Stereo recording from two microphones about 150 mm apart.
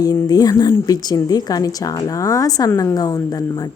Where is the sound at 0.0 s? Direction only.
25° left (ahead or behind).